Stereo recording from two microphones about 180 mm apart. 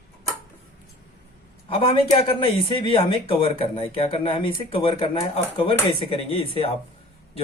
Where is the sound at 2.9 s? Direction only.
30° left (ahead or behind).